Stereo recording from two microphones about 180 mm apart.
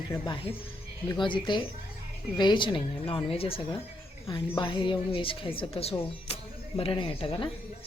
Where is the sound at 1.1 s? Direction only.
25° left (ahead or behind).